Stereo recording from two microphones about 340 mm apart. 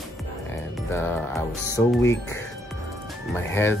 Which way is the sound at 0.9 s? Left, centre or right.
Centre.